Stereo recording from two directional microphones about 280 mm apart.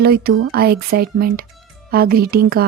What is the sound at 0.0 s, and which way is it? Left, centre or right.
Speech, right.